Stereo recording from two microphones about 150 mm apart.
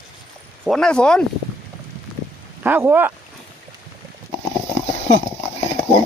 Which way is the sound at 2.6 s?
15° right (ahead or behind).